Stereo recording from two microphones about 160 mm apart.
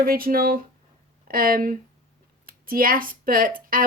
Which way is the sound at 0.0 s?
65° right (ahead or behind).